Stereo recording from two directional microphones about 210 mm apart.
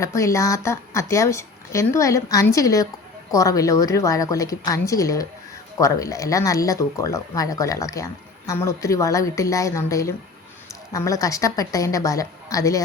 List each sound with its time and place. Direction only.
0.0 s speech: 15° left (ahead or behind)